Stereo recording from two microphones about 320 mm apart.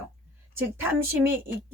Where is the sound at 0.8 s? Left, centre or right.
Centre.